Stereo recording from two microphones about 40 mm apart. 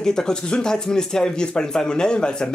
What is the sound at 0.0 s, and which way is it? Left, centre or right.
Speech, centre.